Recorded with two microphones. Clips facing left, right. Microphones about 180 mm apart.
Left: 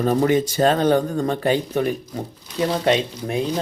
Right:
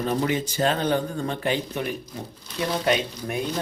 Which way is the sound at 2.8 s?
25° left (ahead or behind).